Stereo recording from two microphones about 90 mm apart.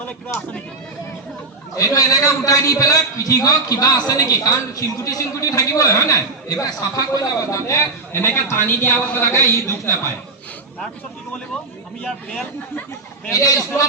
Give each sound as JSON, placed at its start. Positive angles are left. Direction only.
{"t": 0.0, "sound": "a woman's voice", "side_deg": 20}
{"t": 1.7, "sound": "a man's voice", "side_deg": 40}
{"t": 8.1, "sound": "a woman's voice", "side_deg": 25}
{"t": 12.3, "sound": "speech", "side_deg": 15}
{"t": 13.3, "sound": "a man's voice", "side_deg": 40}